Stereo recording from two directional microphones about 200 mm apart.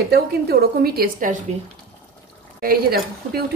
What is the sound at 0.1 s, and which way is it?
A woman's voice, 50° right (ahead or behind).